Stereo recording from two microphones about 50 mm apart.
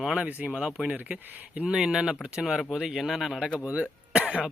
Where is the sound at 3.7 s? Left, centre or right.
Right.